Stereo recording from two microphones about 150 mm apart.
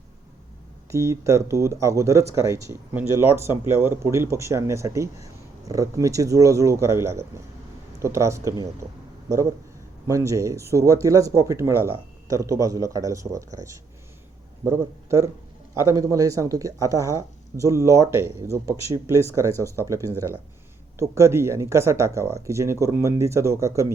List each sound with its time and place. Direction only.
0.9 s speech: 20° right (ahead or behind)
10.1 s a man's voice: 20° right (ahead or behind)
19.5 s speech: 15° left (ahead or behind)
19.8 s speech: 20° right (ahead or behind)